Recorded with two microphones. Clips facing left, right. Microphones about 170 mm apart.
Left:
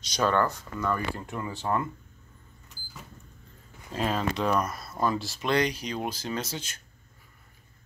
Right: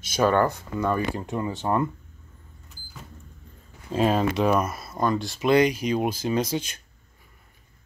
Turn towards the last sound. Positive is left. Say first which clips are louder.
# right 8 dB
turn(degrees=-10)  # may be behind; listen again after turning